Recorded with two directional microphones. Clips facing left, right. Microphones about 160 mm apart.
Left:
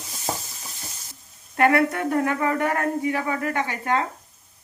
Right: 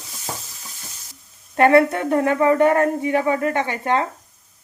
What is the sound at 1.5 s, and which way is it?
Speech, 25° right (ahead or behind).